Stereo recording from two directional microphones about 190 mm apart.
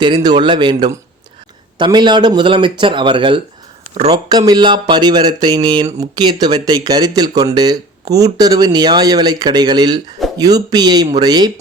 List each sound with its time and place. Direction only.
0.0 s speech: 25° right (ahead or behind)